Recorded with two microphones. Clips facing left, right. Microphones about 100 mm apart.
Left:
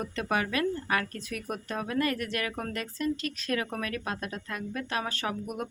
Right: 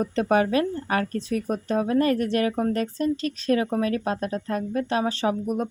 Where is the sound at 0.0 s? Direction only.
35° right (ahead or behind).